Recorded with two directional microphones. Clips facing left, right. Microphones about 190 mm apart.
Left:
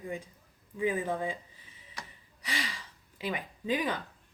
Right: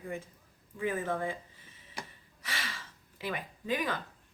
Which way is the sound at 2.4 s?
15° left (ahead or behind).